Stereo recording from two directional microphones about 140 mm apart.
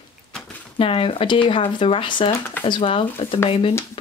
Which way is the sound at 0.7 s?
40° left (ahead or behind).